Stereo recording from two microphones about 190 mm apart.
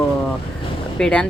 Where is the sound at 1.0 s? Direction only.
5° left (ahead or behind).